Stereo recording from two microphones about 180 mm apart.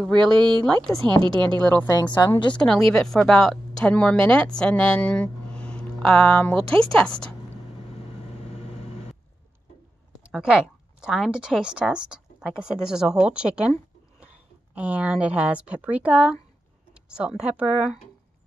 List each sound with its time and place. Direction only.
0.1 s a woman's voice: 25° right (ahead or behind)
1.8 s a woman's voice: 20° left (ahead or behind)
2.5 s a woman's voice: 5° left (ahead or behind)
10.2 s speech: 5° right (ahead or behind)
14.8 s a woman's voice: 10° right (ahead or behind)